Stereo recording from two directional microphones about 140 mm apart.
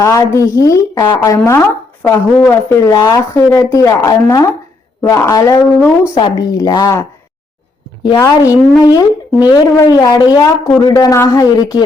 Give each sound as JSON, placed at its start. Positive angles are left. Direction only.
{"t": 0.0, "sound": "a woman's voice", "side_deg": 20}
{"t": 8.2, "sound": "a woman's voice", "side_deg": 25}